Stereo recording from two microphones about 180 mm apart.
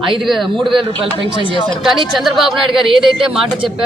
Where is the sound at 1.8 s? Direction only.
Centre (ahead or behind).